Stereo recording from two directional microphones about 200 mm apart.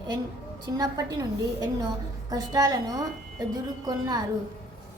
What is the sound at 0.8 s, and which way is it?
A woman's voice, 20° right (ahead or behind).